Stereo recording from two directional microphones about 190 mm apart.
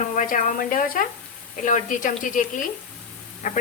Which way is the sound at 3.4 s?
40° left (ahead or behind).